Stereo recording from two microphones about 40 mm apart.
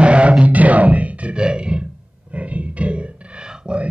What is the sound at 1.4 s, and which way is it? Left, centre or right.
Music, right.